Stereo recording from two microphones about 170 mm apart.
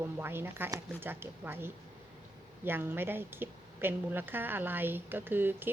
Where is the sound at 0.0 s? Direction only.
15° right (ahead or behind).